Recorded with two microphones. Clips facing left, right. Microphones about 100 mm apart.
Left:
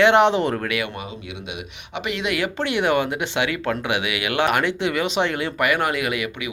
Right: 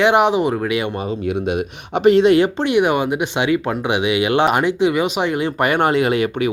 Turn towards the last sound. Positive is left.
turn(degrees=-35)  # may be behind; listen again after turning